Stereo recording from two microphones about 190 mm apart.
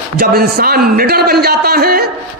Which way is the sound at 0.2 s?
50° right (ahead or behind).